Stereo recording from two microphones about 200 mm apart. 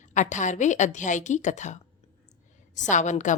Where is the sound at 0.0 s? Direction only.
35° left (ahead or behind).